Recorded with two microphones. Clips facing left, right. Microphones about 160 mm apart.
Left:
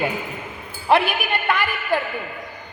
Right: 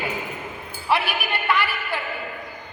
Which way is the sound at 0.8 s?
50° left (ahead or behind).